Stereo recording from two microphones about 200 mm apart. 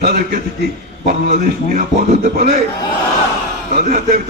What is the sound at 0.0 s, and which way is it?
Speech, 50° right (ahead or behind).